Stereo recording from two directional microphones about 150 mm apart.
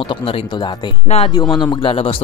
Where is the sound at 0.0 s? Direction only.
35° left (ahead or behind).